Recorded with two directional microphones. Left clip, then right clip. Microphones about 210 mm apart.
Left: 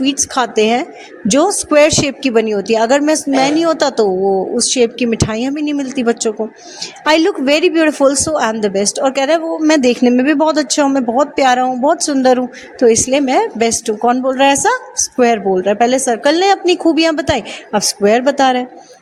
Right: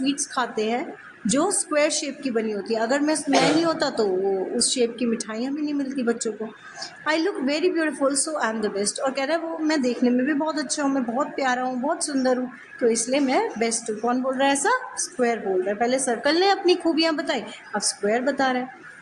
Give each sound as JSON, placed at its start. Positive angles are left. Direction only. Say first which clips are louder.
{"t": 0.0, "sound": "a woman's voice", "louder": "left 10 dB", "side_deg": 35}